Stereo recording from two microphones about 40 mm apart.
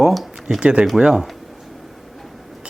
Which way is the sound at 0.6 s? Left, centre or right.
Right.